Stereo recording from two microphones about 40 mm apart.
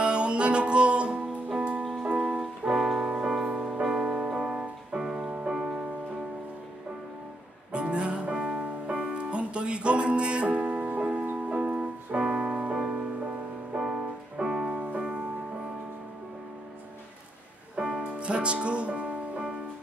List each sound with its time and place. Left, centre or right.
0.0 s music: right
7.7 s music: right
17.7 s music: right